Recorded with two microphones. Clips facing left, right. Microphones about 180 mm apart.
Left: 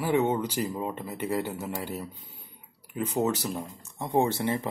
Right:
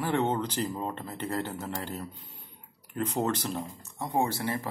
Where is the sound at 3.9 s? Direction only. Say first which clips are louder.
Left 3 dB; 20° left (ahead or behind).